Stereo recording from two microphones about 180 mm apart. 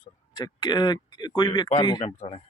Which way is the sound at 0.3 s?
25° left (ahead or behind).